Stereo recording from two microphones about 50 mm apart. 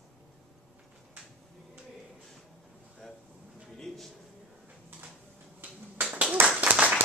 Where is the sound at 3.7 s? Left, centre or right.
Centre.